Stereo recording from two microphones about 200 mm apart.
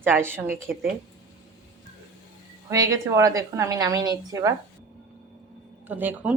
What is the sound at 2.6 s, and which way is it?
Speech, 15° right (ahead or behind).